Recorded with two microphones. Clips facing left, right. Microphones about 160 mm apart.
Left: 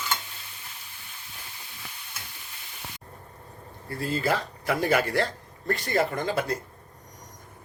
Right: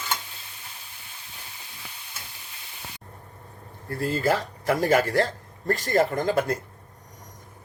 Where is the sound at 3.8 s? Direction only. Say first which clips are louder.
Right 3 dB; 45° right (ahead or behind).